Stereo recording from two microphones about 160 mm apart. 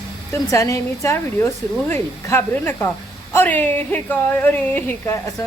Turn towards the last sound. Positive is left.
turn(degrees=15)  # may be behind; listen again after turning